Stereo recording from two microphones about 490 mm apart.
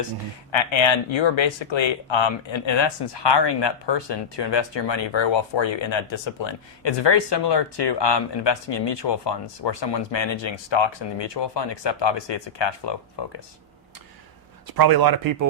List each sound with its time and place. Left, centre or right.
0.5 s speech: left
14.7 s speech: right